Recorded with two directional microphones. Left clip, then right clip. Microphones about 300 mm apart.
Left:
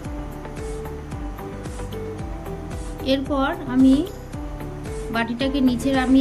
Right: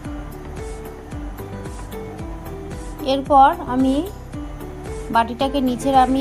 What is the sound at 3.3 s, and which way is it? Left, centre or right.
Speech, centre.